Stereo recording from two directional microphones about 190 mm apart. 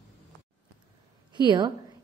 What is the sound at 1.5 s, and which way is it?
Speech, 25° right (ahead or behind).